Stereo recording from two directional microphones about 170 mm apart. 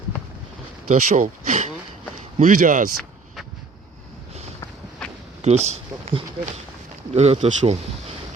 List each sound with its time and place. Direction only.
0.9 s speech: 45° right (ahead or behind)
5.0 s a sound: 5° left (ahead or behind)
5.4 s speech: 40° right (ahead or behind)